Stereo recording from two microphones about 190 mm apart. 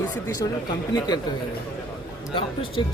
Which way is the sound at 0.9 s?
20° left (ahead or behind).